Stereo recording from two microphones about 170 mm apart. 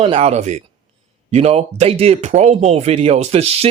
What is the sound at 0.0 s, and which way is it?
Speech, 35° right (ahead or behind).